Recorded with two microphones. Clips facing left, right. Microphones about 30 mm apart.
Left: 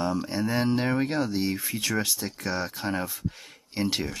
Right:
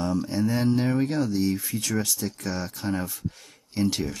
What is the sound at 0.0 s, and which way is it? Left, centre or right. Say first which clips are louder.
Speech: right 2 dB; left.